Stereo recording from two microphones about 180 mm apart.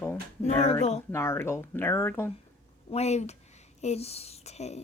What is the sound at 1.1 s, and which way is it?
Speech, 15° left (ahead or behind).